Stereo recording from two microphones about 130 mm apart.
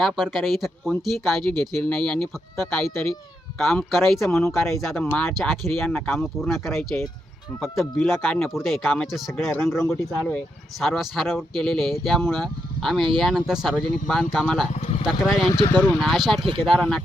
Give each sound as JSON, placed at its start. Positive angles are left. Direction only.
{"t": 0.0, "sound": "speech", "side_deg": 0}
{"t": 10.8, "sound": "speech", "side_deg": 0}
{"t": 14.8, "sound": "speech", "side_deg": 55}
{"t": 15.0, "sound": "speech", "side_deg": 0}